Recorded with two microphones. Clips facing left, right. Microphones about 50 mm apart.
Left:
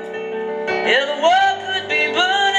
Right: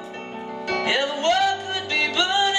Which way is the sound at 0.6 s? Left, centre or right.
Left.